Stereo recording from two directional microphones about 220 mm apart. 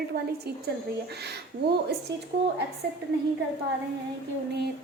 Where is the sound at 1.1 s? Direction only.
50° right (ahead or behind).